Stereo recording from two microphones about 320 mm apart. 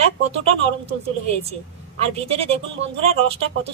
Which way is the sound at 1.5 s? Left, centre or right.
Centre.